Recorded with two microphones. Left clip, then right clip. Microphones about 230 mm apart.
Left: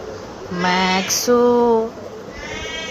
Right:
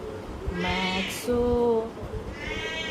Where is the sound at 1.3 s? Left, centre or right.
Left.